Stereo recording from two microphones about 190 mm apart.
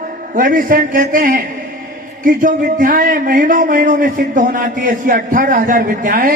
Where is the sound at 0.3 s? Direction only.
45° right (ahead or behind).